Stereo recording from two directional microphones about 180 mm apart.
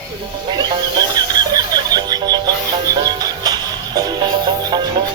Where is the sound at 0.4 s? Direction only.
25° right (ahead or behind).